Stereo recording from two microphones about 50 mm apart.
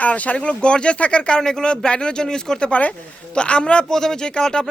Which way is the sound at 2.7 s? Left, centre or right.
Left.